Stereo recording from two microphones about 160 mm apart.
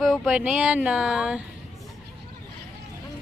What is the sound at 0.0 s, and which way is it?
Speech, centre (ahead or behind).